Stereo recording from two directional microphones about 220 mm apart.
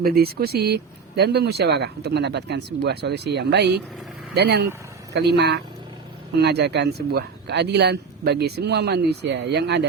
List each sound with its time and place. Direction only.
0.0 s speech: 45° right (ahead or behind)